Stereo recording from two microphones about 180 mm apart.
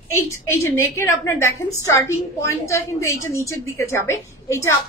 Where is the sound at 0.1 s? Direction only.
15° left (ahead or behind).